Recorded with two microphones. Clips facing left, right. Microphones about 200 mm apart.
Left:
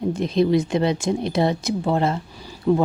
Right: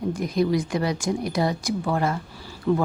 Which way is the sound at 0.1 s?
25° left (ahead or behind).